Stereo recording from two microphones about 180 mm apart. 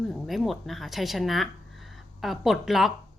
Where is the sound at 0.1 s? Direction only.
Centre (ahead or behind).